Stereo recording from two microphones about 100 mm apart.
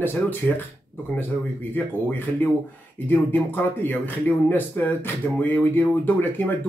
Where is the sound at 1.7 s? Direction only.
20° left (ahead or behind).